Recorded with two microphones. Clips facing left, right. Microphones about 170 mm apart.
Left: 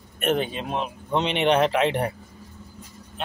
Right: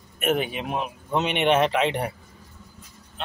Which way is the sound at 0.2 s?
10° right (ahead or behind).